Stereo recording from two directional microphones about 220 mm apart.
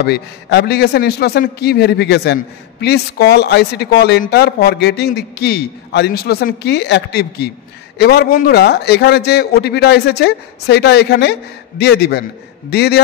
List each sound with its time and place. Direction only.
0.0 s speech: 50° left (ahead or behind)